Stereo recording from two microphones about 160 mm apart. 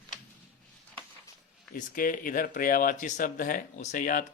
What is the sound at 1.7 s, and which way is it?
Speech, 60° left (ahead or behind).